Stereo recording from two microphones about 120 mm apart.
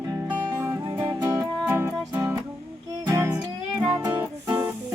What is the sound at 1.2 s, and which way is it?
Music, 20° right (ahead or behind).